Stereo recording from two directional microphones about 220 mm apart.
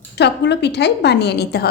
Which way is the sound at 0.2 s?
50° left (ahead or behind).